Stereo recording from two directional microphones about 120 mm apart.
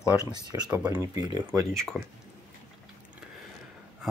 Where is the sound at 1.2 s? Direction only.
35° right (ahead or behind).